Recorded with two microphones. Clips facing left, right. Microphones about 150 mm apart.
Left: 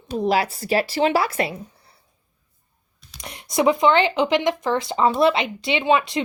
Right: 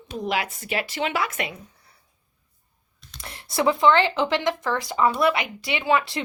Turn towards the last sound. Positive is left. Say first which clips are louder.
# left 3 dB
turn(degrees=20)  # may be behind; listen again after turning